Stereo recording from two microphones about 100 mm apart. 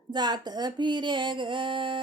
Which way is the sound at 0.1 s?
45° right (ahead or behind).